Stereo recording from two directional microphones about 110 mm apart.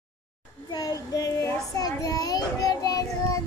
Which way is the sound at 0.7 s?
35° left (ahead or behind).